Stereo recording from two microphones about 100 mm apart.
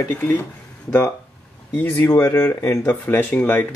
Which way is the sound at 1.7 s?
20° left (ahead or behind).